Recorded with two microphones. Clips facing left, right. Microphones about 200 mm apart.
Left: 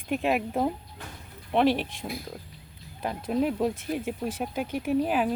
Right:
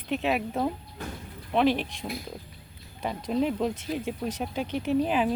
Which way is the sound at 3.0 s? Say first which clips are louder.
Even; 5° left (ahead or behind).